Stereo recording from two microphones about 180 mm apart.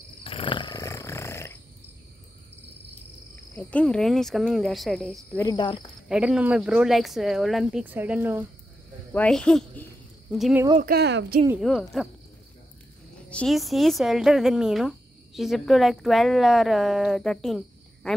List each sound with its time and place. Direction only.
0.2 s wild animals: 30° left (ahead or behind); by 1.6 s 15° left (ahead or behind)
3.5 s speech: 5° left (ahead or behind)
5.4 s speech: 25° left (ahead or behind)
6.0 s speech: 5° right (ahead or behind)
9.1 s speech: 5° left (ahead or behind)
10.8 s speech: 60° right (ahead or behind)
11.7 s speech: centre (ahead or behind)
13.3 s speech: 5° left (ahead or behind)